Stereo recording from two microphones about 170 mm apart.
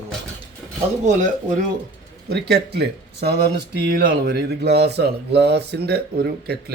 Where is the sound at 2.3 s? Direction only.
70° right (ahead or behind).